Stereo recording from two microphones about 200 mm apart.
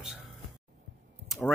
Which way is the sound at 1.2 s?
Centre (ahead or behind).